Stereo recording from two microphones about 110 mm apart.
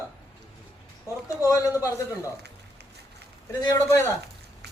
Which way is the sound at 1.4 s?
30° left (ahead or behind).